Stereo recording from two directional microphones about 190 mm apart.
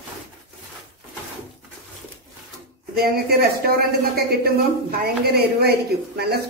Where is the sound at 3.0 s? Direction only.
55° right (ahead or behind).